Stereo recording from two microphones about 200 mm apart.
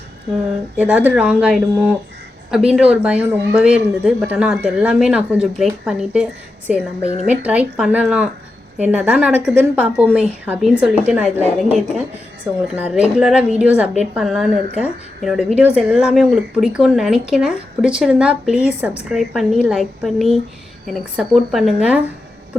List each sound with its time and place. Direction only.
0.8 s a woman's voice: 10° right (ahead or behind)
7.0 s a woman's voice: 35° left (ahead or behind)
7.3 s a woman's voice: 5° right (ahead or behind)